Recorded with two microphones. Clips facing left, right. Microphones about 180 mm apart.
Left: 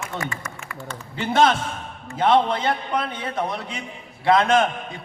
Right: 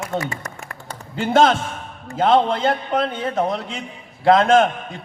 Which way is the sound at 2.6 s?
50° right (ahead or behind).